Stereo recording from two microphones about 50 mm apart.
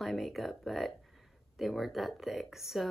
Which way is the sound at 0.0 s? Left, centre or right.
Centre.